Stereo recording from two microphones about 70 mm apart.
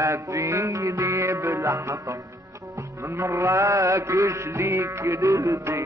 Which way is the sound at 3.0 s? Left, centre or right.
Right.